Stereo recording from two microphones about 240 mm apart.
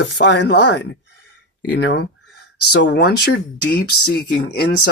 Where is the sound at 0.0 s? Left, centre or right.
Left.